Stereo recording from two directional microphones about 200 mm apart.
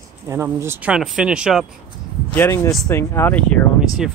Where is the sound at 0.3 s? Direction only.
10° right (ahead or behind).